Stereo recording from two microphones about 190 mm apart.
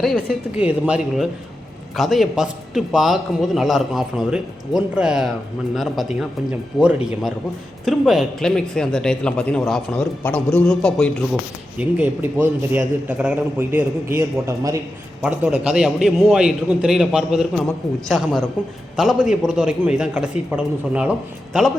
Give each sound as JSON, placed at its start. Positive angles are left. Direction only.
{"t": 0.3, "sound": "a man's voice", "side_deg": -5}
{"t": 11.8, "sound": "a man's voice", "side_deg": -10}
{"t": 18.6, "sound": "a man's voice", "side_deg": -5}